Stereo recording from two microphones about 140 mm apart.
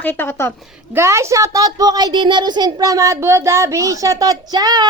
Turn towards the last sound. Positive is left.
turn(degrees=-30)  # may be behind; listen again after turning